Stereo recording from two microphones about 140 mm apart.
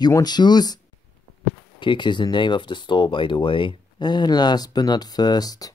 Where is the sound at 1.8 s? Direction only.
35° left (ahead or behind).